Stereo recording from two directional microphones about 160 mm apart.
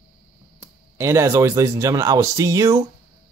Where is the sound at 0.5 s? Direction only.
15° right (ahead or behind).